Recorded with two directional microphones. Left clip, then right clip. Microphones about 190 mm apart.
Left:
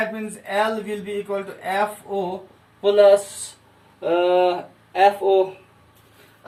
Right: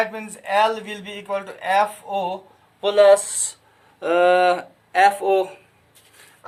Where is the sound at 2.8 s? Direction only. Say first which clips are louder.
Even; 40° right (ahead or behind).